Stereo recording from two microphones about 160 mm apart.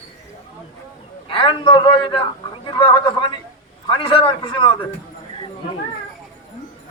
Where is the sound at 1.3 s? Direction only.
35° left (ahead or behind).